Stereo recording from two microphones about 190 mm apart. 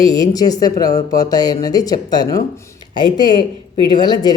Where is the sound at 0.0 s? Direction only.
20° left (ahead or behind).